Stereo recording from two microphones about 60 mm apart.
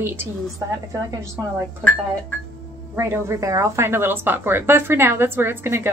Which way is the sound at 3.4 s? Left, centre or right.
Right.